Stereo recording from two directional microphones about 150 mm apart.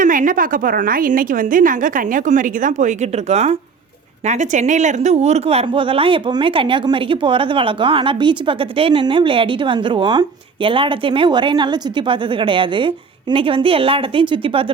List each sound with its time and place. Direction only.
0.0 s a woman's voice: 60° right (ahead or behind); by 14.6 s 35° right (ahead or behind)